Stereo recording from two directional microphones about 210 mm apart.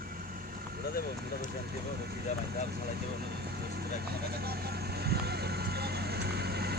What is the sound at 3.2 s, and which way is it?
Vehicle, 50° right (ahead or behind).